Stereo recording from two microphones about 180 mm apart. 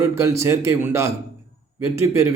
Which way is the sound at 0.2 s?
15° right (ahead or behind).